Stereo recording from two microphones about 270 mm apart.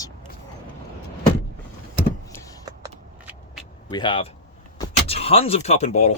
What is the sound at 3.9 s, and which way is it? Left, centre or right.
Speech, centre.